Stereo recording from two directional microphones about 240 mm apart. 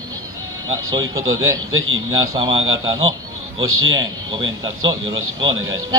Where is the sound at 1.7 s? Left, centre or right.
Right.